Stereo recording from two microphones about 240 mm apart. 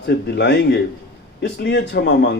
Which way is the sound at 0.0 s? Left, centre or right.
Left.